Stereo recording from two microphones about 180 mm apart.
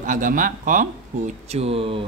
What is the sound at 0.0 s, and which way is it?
Speech, 45° right (ahead or behind).